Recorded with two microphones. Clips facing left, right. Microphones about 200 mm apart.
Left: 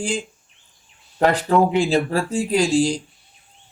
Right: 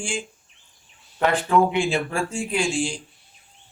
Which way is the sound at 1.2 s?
35° left (ahead or behind).